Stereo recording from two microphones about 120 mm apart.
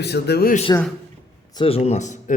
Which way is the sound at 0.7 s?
30° left (ahead or behind).